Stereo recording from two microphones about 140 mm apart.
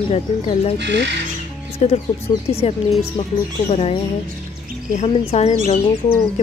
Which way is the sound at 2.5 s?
45° left (ahead or behind).